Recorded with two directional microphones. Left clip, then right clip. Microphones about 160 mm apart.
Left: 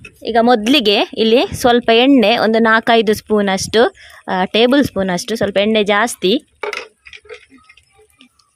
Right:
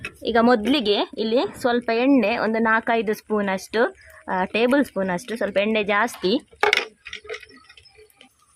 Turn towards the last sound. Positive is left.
turn(degrees=-15)  # may be behind; listen again after turning